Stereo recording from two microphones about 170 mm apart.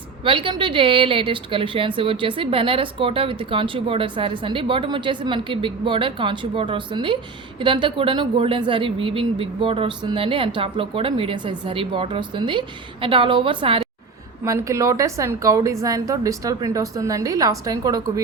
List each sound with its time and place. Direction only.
0.3 s a woman's voice: 30° right (ahead or behind)
14.4 s a woman's voice: 20° right (ahead or behind)